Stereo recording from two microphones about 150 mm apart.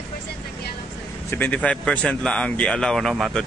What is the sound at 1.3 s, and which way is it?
Speech, 10° left (ahead or behind).